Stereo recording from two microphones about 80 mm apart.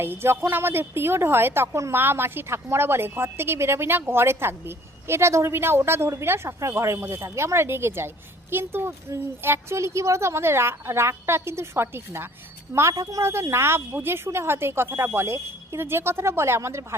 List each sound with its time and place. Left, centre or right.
0.0 s a woman's voice: right